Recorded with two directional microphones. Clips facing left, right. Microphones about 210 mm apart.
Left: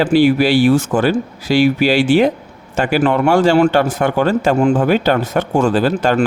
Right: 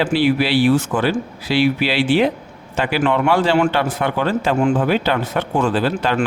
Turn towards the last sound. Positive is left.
turn(degrees=45)  # may be behind; listen again after turning